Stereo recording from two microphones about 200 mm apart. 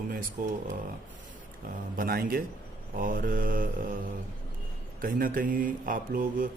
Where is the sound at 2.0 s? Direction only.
45° right (ahead or behind).